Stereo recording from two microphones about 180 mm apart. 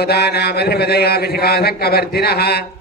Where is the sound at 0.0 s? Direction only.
65° left (ahead or behind).